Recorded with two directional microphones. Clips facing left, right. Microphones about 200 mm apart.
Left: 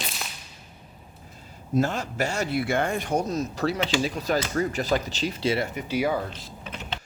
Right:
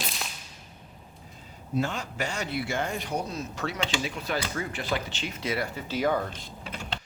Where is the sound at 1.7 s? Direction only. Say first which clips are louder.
Left 5 dB; 40° left (ahead or behind); by 5.8 s 25° left (ahead or behind).